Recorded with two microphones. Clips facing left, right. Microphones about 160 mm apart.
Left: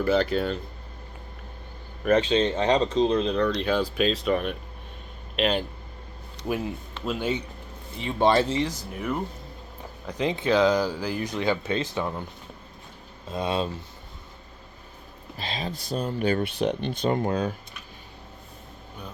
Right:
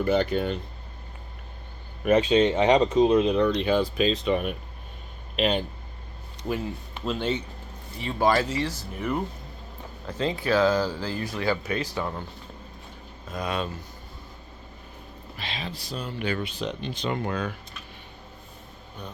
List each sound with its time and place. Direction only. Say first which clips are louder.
0.0 s speech: even; centre (ahead or behind)
2.3 s speech: right 3 dB; 15° right (ahead or behind)
7.0 s speech: even; 10° left (ahead or behind)
7.9 s speech: left 2 dB; 25° left (ahead or behind)
8.9 s speech: right 1 dB; centre (ahead or behind)
10.1 s speech: left 1 dB; 15° left (ahead or behind)
13.3 s speech: left 3 dB; 30° left (ahead or behind)
15.4 s speech: left 3 dB; 40° left (ahead or behind)
16.4 s speech: left 5 dB; 60° left (ahead or behind)
17.2 s speech: left 4 dB; 35° left (ahead or behind)